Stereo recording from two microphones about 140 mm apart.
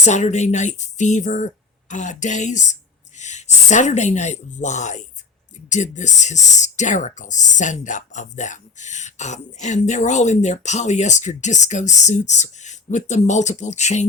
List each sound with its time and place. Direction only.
0.0 s speech: 55° left (ahead or behind)